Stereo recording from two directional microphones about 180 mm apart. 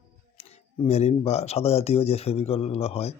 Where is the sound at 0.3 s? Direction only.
35° left (ahead or behind).